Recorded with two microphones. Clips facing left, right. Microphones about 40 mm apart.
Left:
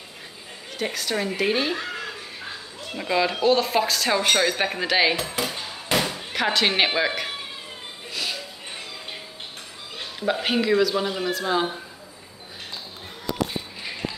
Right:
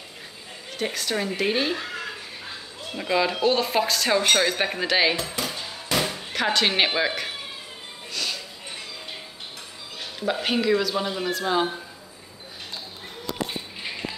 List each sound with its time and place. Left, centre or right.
0.7 s speech: centre
8.1 s music: centre
10.2 s speech: centre